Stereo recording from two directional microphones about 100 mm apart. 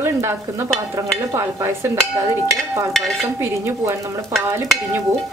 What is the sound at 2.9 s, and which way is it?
Stir, 5° left (ahead or behind).